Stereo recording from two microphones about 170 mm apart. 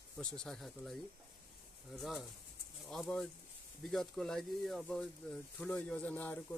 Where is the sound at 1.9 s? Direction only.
Centre (ahead or behind).